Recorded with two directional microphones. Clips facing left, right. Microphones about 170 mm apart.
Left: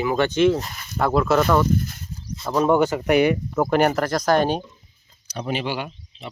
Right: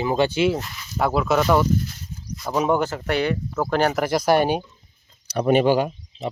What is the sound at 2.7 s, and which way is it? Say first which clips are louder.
Speech: left 5 dB; 10° left (ahead or behind).